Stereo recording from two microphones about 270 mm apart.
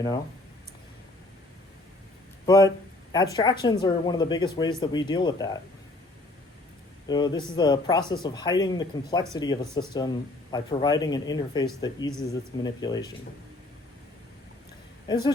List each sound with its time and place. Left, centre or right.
2.5 s speech: centre
7.1 s speech: centre
15.0 s speech: centre